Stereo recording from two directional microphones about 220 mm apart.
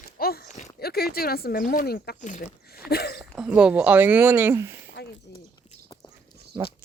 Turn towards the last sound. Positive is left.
turn(degrees=-10)  # may be behind; listen again after turning